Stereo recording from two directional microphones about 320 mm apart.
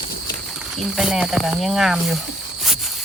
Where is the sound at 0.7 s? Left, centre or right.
Centre.